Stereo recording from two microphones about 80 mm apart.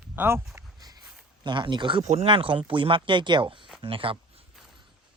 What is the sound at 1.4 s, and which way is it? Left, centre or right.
Speech, right.